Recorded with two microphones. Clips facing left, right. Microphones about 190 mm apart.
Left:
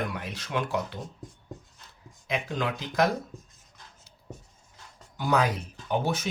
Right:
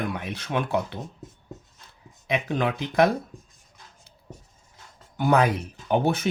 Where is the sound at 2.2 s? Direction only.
60° right (ahead or behind).